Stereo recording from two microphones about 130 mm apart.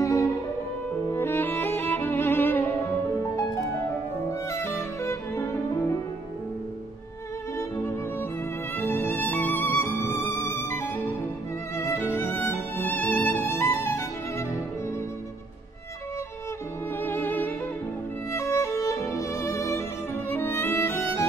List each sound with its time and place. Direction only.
0.0 s music: 25° left (ahead or behind)
4.3 s music: 20° left (ahead or behind)
7.5 s music: 20° left (ahead or behind)
17.0 s music: 15° left (ahead or behind)
18.3 s violin: 20° left (ahead or behind)
20.2 s music: 15° left (ahead or behind)